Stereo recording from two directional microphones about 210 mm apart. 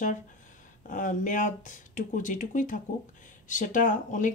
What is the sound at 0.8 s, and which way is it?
Speech, 40° left (ahead or behind).